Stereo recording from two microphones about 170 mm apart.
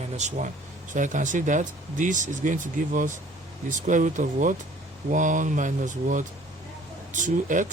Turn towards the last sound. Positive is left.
turn(degrees=-50)  # may be behind; listen again after turning